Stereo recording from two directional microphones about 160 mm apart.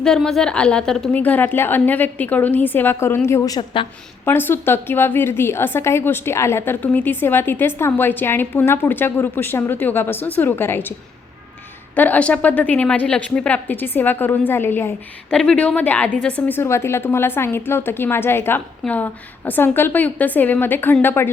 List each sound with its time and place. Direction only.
0.0 s a woman's voice: 5° left (ahead or behind); by 3.8 s 25° left (ahead or behind)
4.3 s a woman's voice: 15° left (ahead or behind)
11.9 s a woman's voice: 10° left (ahead or behind)